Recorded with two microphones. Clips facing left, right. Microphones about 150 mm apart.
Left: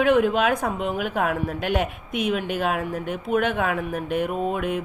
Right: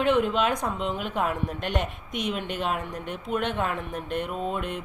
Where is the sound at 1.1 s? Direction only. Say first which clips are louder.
Left 2 dB; 65° left (ahead or behind).